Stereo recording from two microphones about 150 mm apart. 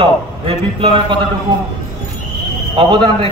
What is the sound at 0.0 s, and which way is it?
A man's voice, 40° right (ahead or behind).